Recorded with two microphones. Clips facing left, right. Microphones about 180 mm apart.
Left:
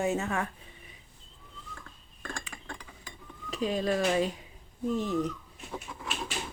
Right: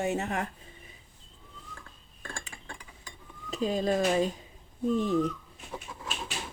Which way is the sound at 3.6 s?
25° right (ahead or behind).